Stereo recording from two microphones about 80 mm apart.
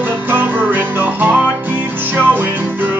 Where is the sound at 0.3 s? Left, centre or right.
Right.